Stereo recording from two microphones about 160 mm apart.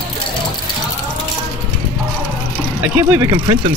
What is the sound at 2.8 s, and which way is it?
Speech, 15° right (ahead or behind).